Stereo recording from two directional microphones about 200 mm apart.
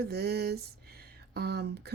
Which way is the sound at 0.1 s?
50° right (ahead or behind).